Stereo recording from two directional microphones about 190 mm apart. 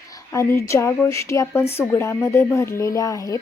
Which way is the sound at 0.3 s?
15° left (ahead or behind).